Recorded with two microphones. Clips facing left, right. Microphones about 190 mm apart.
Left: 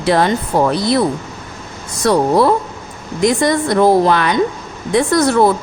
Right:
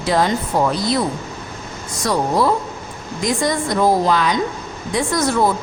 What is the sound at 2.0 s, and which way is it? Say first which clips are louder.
A woman's voice: left 5 dB; 65° left (ahead or behind).